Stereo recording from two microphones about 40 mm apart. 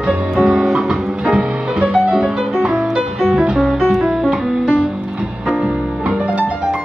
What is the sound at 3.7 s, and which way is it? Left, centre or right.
Music, centre.